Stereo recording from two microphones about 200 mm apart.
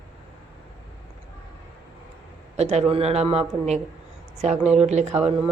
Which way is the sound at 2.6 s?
35° right (ahead or behind).